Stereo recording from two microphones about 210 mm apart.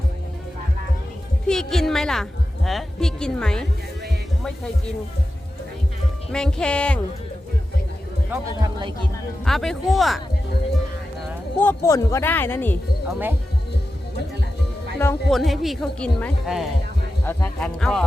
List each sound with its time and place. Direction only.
1.5 s speech: centre (ahead or behind)
6.3 s speech: 5° left (ahead or behind)
8.3 s speech: 15° right (ahead or behind)
9.4 s speech: centre (ahead or behind)
11.6 s speech: 10° left (ahead or behind)
13.1 s speech: 10° right (ahead or behind)
14.9 s speech: 5° left (ahead or behind)